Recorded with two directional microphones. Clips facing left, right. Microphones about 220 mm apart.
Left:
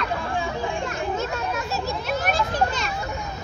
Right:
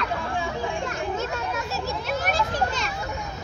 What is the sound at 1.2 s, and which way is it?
Children playing, 45° left (ahead or behind).